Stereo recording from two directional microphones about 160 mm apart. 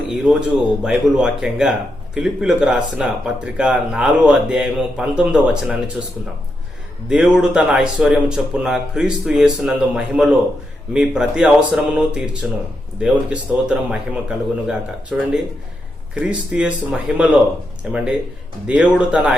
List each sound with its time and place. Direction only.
0.1 s speech: 5° right (ahead or behind)
7.1 s speech: 5° right (ahead or behind)